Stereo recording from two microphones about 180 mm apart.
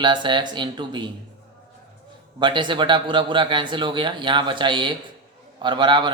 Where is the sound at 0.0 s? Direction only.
25° right (ahead or behind).